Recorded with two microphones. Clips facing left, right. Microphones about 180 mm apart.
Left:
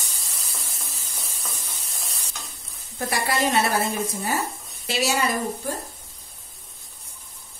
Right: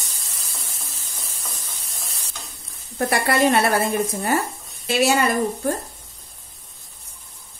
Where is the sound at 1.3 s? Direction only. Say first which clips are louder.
Even; centre (ahead or behind).